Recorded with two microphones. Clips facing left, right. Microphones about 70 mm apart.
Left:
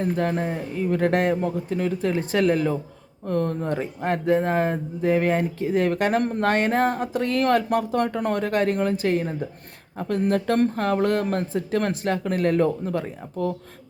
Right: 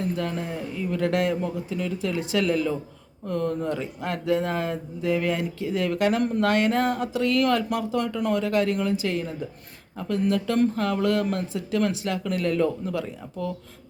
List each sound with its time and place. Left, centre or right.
0.0 s speech: left